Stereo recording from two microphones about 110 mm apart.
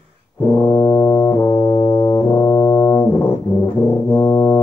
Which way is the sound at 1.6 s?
45° left (ahead or behind).